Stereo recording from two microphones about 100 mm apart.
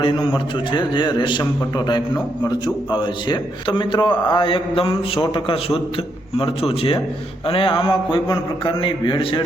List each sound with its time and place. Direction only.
0.0 s a man's voice: 60° left (ahead or behind)